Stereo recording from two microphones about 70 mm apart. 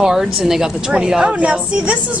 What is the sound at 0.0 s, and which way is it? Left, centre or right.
A woman's voice, centre.